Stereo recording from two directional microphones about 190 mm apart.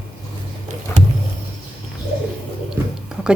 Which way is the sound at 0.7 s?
40° right (ahead or behind).